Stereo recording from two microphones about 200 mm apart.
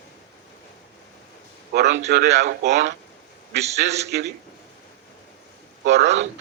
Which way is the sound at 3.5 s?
35° right (ahead or behind).